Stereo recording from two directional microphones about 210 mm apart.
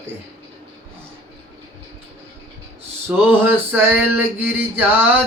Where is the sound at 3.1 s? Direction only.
10° right (ahead or behind).